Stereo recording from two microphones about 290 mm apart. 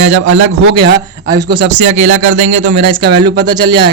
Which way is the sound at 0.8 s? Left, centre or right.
Right.